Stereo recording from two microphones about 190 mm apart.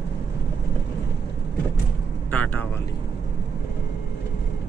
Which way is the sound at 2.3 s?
10° left (ahead or behind).